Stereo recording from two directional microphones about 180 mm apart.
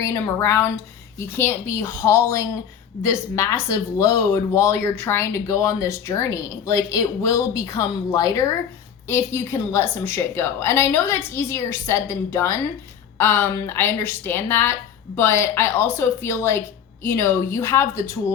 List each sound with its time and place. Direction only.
0.0 s speech: 15° left (ahead or behind)